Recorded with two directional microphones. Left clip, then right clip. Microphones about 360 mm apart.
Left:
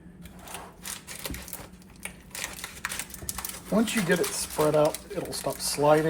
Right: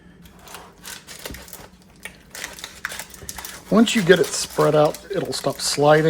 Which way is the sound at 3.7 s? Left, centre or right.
Right.